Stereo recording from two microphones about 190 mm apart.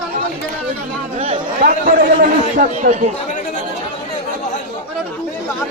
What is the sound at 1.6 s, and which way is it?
A man's voice, 45° right (ahead or behind).